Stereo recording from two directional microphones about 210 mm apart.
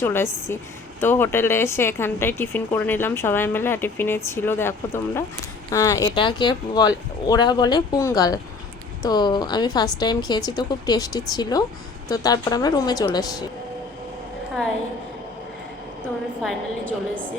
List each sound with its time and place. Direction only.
0.0 s a woman's voice: 10° left (ahead or behind)